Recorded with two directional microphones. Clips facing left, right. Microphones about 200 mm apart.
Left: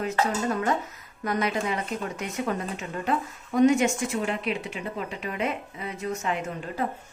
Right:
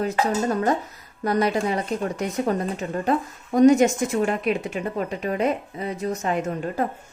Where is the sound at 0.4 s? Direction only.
35° right (ahead or behind).